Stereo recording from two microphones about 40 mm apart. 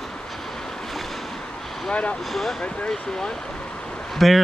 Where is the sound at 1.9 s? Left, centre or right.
Left.